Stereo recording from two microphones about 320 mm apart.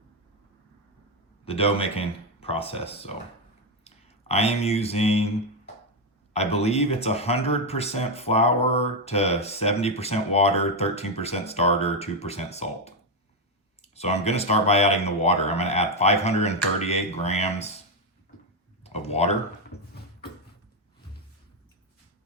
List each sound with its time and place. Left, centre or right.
1.5 s speech: centre
6.3 s speech: centre
18.8 s speech: centre
19.7 s a sound: left